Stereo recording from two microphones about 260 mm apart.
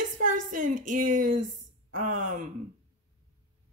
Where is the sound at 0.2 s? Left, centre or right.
Right.